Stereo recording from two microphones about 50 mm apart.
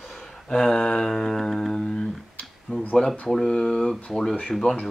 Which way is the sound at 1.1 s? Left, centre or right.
Centre.